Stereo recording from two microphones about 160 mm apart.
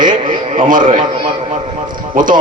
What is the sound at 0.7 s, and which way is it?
Speech, 55° right (ahead or behind).